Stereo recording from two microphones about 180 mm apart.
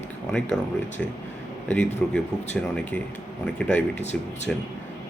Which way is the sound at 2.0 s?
5° left (ahead or behind).